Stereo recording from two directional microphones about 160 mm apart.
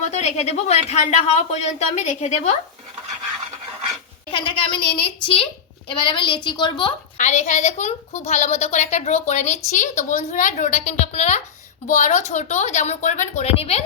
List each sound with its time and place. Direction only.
0.0 s a woman's voice: 45° left (ahead or behind)
4.3 s a woman's voice: 30° left (ahead or behind)
7.2 s a woman's voice: 50° left (ahead or behind)